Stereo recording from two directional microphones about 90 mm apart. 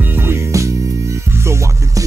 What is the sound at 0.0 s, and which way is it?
Music, 25° right (ahead or behind).